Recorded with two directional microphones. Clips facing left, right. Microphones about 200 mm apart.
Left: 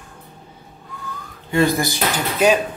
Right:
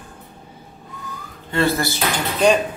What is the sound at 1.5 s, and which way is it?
Speech, 15° left (ahead or behind).